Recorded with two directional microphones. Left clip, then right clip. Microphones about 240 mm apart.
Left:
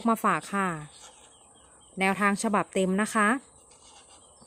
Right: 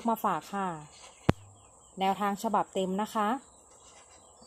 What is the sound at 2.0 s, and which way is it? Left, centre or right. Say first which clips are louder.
A woman's voice: left 4 dB; left.